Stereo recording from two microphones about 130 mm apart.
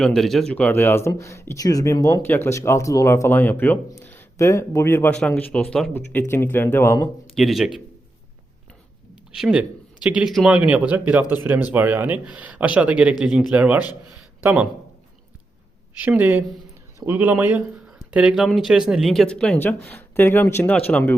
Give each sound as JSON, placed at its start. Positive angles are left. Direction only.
{"t": 0.0, "sound": "a man's voice", "side_deg": 5}
{"t": 7.3, "sound": "speech", "side_deg": 0}
{"t": 9.3, "sound": "speech", "side_deg": -5}
{"t": 16.0, "sound": "speech", "side_deg": -10}